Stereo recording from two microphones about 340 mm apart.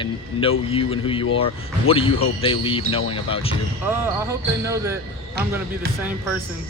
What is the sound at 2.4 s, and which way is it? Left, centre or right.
Speech, centre.